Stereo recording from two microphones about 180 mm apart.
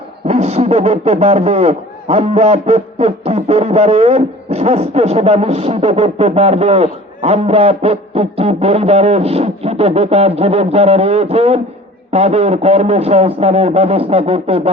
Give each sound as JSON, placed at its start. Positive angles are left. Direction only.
{"t": 0.3, "sound": "a man's voice", "side_deg": -35}